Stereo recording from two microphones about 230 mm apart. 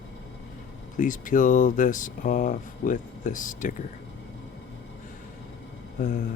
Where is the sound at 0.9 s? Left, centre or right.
Left.